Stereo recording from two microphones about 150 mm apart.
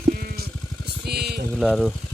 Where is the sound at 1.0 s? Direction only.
90° right.